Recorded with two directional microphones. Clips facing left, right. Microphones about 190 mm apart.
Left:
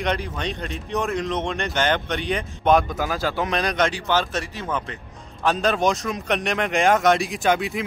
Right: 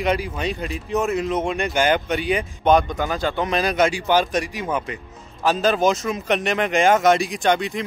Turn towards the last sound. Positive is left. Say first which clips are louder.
# right 1 dB
turn(degrees=5)  # may be behind; listen again after turning